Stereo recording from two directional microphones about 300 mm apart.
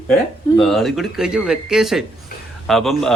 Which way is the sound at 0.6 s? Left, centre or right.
Centre.